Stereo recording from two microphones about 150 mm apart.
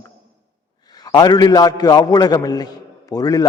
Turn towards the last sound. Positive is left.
turn(degrees=25)  # may be behind; listen again after turning